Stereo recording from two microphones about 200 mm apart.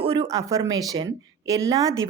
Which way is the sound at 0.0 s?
20° right (ahead or behind).